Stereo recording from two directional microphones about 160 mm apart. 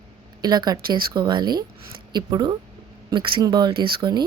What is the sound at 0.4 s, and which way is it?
Speech, 25° right (ahead or behind).